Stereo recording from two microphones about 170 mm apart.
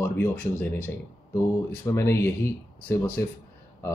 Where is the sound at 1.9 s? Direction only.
15° left (ahead or behind).